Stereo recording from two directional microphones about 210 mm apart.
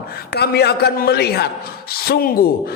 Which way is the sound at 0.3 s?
50° left (ahead or behind).